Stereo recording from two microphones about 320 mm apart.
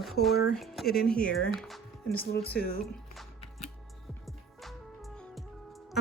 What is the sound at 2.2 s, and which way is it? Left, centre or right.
Speech, left.